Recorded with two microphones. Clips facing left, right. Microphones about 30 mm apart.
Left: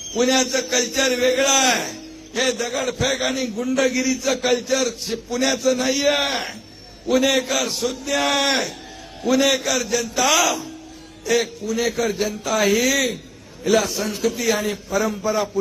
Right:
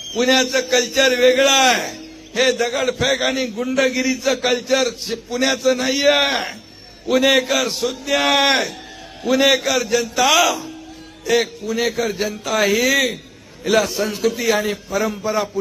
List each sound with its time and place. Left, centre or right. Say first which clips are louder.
0.3 s a man's voice: right 6 dB; right
5.0 s a man's voice: right 2 dB; centre
7.5 s a man's voice: right 3 dB; centre
8.1 s a man's voice: right 4 dB; right
10.3 s a man's voice: right 3 dB; centre
11.8 s a man's voice: right 1 dB; centre
12.8 s a man's voice: right 3 dB; centre